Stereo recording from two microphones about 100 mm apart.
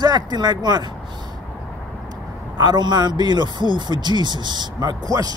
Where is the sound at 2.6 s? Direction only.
45° right (ahead or behind).